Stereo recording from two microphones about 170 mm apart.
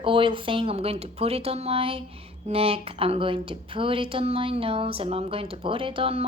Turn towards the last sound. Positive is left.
turn(degrees=-35)  # may be behind; listen again after turning